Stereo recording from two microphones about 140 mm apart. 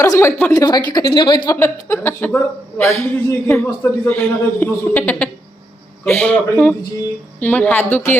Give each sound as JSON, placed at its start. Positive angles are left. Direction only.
{"t": 0.0, "sound": "speech", "side_deg": 20}
{"t": 0.5, "sound": "speech", "side_deg": 25}
{"t": 1.5, "sound": "a man's voice", "side_deg": 15}